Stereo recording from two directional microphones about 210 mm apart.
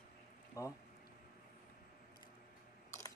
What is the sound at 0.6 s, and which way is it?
Speech, 15° left (ahead or behind).